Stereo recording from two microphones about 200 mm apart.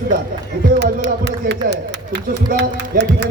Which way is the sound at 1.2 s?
60° right (ahead or behind).